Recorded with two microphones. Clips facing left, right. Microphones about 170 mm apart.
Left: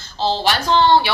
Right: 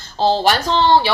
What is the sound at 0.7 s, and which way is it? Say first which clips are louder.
Speech: left 2 dB; 35° right (ahead or behind).